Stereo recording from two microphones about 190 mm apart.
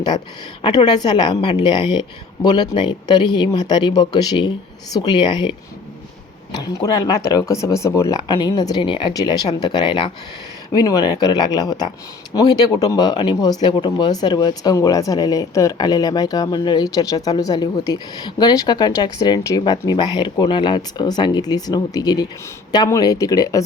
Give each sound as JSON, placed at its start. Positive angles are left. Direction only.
{"t": 0.9, "sound": "speech", "side_deg": 20}